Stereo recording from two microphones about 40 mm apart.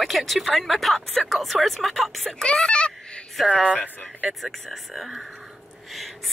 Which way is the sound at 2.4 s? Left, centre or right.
Left.